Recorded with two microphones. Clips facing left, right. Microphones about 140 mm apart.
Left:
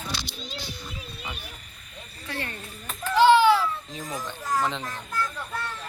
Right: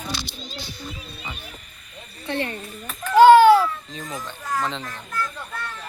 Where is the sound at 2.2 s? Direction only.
20° right (ahead or behind).